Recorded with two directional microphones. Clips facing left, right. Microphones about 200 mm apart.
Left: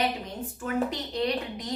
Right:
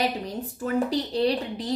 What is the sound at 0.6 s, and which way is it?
A woman's voice, 35° right (ahead or behind).